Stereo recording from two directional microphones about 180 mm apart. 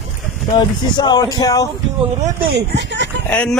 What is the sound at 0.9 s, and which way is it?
Speech, 25° left (ahead or behind).